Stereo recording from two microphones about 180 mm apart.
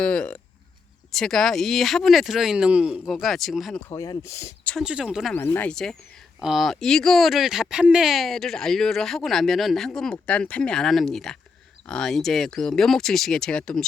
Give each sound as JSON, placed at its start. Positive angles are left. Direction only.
{"t": 0.0, "sound": "speech", "side_deg": 5}
{"t": 3.8, "sound": "speech", "side_deg": 20}
{"t": 4.8, "sound": "speech", "side_deg": -5}
{"t": 5.4, "sound": "speech", "side_deg": 10}